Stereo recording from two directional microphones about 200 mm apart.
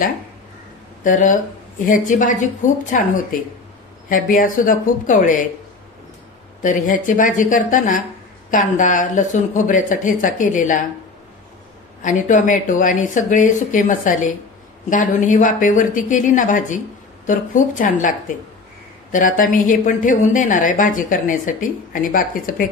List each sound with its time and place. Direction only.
1.0 s a woman's voice: 40° left (ahead or behind)
6.6 s a woman's voice: 40° left (ahead or behind)
12.0 s a woman's voice: 40° left (ahead or behind)